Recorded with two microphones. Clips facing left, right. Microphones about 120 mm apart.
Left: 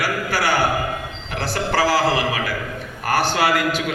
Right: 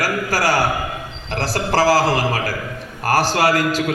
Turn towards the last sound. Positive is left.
turn(degrees=-40)  # may be behind; listen again after turning